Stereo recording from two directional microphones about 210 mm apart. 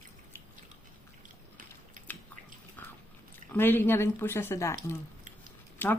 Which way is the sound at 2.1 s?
10° left (ahead or behind).